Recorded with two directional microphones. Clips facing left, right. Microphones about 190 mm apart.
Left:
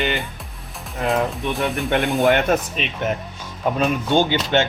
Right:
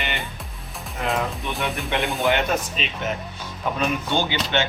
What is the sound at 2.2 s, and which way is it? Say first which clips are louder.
Speech: left 4 dB; 50° left (ahead or behind).